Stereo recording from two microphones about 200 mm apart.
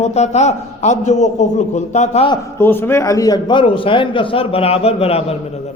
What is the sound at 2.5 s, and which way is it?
A man's voice, 10° left (ahead or behind).